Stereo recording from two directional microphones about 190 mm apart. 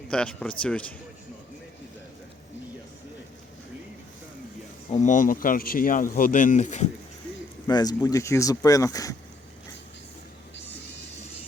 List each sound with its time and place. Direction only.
0.1 s a man's voice: 5° left (ahead or behind)
4.9 s speech: 40° left (ahead or behind)
7.7 s speech: 20° left (ahead or behind)